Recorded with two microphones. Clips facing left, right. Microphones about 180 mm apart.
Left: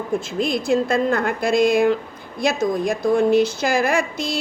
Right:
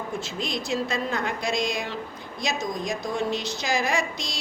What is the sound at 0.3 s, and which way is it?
A woman's voice, 55° left (ahead or behind).